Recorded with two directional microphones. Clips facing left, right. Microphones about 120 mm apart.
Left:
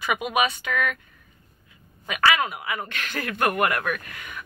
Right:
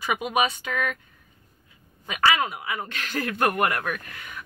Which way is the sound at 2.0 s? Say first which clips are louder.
Left 1 dB; 30° right (ahead or behind).